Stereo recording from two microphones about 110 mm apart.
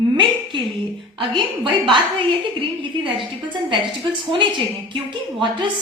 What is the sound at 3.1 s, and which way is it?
A woman's voice, 50° right (ahead or behind).